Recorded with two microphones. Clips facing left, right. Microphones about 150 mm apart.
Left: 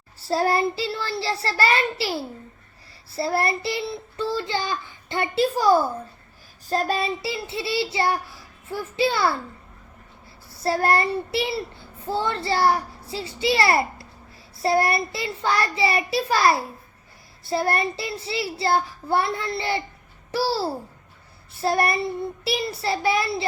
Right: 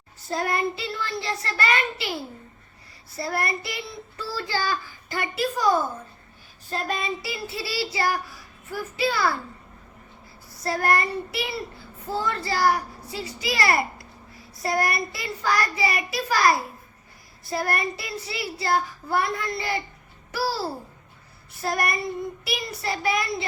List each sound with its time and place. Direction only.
0.2 s child singing: 30° left (ahead or behind)
3.1 s a child's voice: 30° left (ahead or behind)
10.5 s a child's voice: 30° left (ahead or behind)